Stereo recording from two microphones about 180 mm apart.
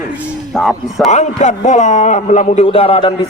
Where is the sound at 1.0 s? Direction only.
40° left (ahead or behind).